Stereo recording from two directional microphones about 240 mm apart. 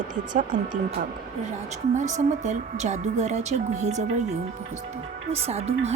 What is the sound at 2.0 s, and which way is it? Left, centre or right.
A woman's voice, right.